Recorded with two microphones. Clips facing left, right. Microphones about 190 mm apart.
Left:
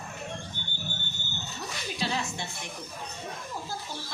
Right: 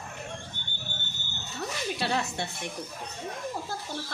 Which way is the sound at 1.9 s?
60° right (ahead or behind).